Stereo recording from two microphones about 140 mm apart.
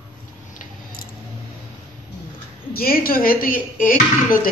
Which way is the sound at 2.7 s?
90° left.